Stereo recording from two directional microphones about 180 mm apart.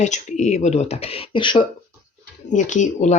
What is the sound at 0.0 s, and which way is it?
Speech, 40° left (ahead or behind).